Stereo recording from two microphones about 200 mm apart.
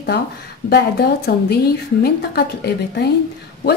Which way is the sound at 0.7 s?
55° left (ahead or behind).